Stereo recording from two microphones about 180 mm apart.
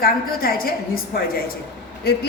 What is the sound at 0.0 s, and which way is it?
Speech, 55° left (ahead or behind).